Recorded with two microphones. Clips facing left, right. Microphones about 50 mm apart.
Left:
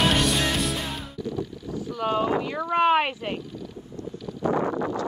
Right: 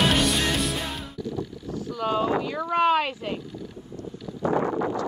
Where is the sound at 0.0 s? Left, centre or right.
Centre.